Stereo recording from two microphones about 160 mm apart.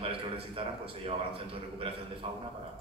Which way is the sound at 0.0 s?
35° right (ahead or behind).